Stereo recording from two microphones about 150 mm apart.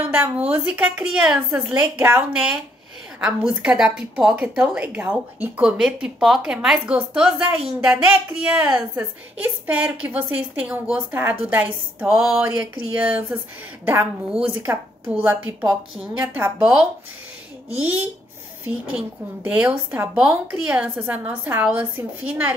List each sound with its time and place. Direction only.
0.0 s a woman's voice: 10° right (ahead or behind)
18.9 s a woman's voice: 10° right (ahead or behind)